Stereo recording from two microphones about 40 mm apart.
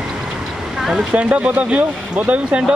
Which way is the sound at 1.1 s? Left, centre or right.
Right.